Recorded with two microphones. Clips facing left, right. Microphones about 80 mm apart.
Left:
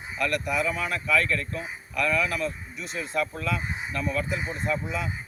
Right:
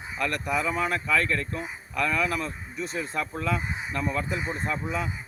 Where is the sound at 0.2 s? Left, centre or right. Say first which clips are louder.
Left 1 dB; right.